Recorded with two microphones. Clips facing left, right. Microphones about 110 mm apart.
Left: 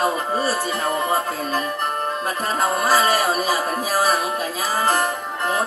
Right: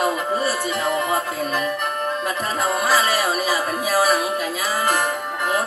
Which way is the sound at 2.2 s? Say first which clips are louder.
Left 3 dB; 40° left (ahead or behind).